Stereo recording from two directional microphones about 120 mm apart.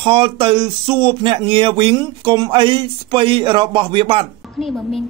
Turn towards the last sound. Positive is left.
turn(degrees=0)  # may be behind; listen again after turning